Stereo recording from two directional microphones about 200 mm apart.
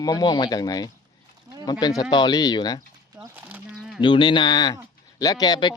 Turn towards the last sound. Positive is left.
turn(degrees=20)  # may be behind; listen again after turning